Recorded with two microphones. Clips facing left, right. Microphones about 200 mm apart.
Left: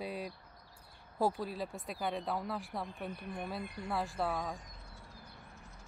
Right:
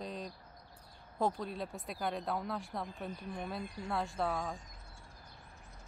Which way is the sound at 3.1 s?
60° left (ahead or behind).